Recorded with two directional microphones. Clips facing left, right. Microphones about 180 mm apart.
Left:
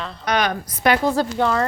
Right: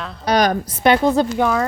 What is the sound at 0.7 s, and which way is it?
Speech, 25° right (ahead or behind).